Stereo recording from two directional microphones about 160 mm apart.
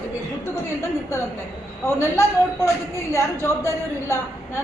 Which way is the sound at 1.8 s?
15° left (ahead or behind).